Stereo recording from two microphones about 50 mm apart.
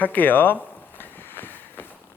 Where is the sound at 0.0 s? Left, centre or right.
Left.